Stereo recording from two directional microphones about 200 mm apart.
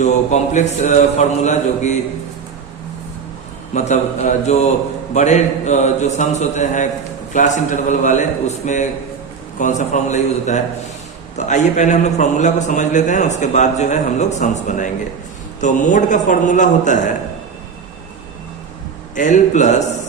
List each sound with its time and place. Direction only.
0.0 s a man's voice: 35° left (ahead or behind)
3.8 s a man's voice: 35° left (ahead or behind)
19.1 s a man's voice: 40° left (ahead or behind)